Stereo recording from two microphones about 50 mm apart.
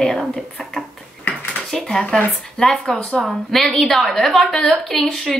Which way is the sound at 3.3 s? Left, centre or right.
Centre.